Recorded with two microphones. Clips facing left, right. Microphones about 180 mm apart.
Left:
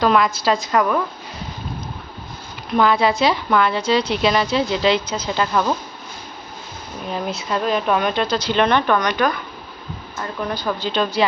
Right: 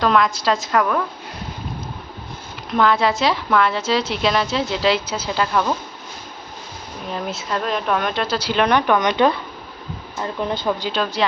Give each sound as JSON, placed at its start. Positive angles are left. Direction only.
{"t": 0.0, "sound": "a woman's voice", "side_deg": 5}
{"t": 2.7, "sound": "a woman's voice", "side_deg": 0}
{"t": 7.1, "sound": "a woman's voice", "side_deg": 0}
{"t": 9.0, "sound": "speech", "side_deg": -25}
{"t": 10.9, "sound": "a woman's voice", "side_deg": 0}